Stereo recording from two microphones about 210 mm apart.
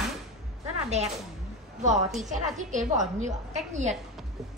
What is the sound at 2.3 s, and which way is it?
Speech, 35° right (ahead or behind).